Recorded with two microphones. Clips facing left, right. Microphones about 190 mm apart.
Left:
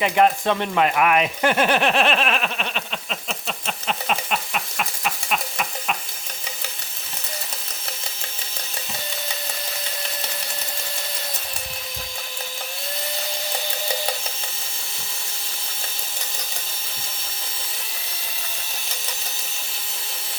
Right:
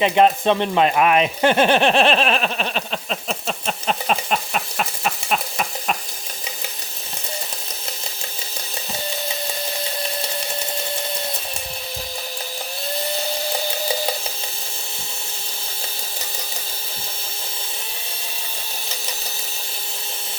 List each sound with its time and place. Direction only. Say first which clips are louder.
0.0 s speech: right 3 dB; 25° right (ahead or behind); by 6.0 s 40° right (ahead or behind)